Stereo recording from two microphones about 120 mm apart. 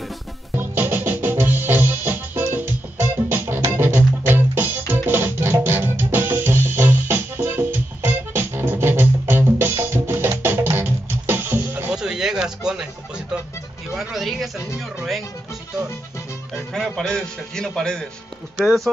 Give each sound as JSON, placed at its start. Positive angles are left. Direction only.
{"t": 0.6, "sound": "music", "side_deg": -15}
{"t": 11.9, "sound": "a sound", "side_deg": -5}
{"t": 13.9, "sound": "music", "side_deg": 0}
{"t": 16.7, "sound": "a man's voice", "side_deg": 5}